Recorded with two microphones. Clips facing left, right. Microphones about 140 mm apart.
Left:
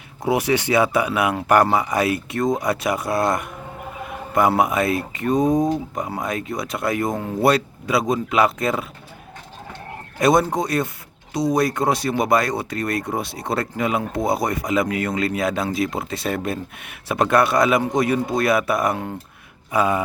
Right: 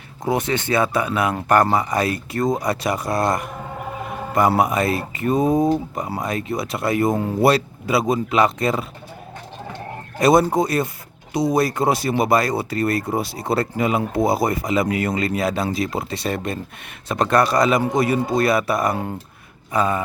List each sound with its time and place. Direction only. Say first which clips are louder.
0.3 s speech: left 2 dB; 10° left (ahead or behind)
10.2 s speech: right 2 dB; 5° right (ahead or behind)
19.7 s a sound: left 1 dB; 10° left (ahead or behind)